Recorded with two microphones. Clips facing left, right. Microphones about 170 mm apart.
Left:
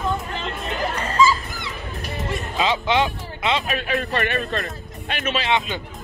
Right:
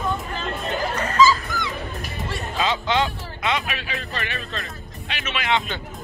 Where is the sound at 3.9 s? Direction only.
55° left (ahead or behind).